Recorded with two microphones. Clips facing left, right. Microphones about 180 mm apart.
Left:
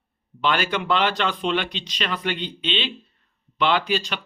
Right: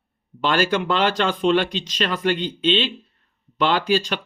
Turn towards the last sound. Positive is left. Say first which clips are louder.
# right 3 dB
turn(degrees=-45)  # may be behind; listen again after turning